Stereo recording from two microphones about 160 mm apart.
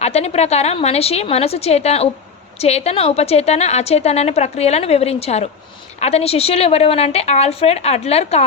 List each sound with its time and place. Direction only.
0.0 s a woman's voice: 40° left (ahead or behind)